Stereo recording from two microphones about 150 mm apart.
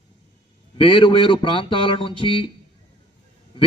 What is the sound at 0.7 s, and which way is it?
Speech, 35° left (ahead or behind).